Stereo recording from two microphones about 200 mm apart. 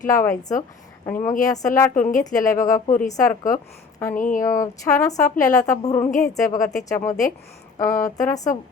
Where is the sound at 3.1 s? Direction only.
15° left (ahead or behind).